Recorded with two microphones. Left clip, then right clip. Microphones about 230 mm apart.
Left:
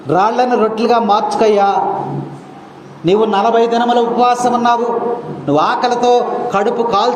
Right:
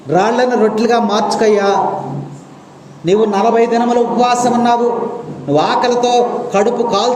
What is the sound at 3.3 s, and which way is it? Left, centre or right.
Speech, left.